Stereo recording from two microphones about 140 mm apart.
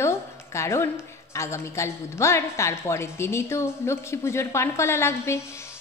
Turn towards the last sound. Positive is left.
turn(degrees=20)  # may be behind; listen again after turning